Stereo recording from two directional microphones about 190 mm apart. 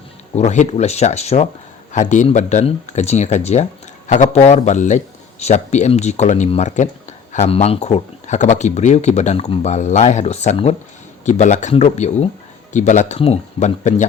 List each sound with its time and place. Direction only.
0.3 s speech: 35° left (ahead or behind)